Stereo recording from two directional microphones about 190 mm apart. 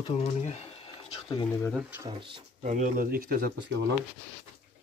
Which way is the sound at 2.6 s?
40° right (ahead or behind).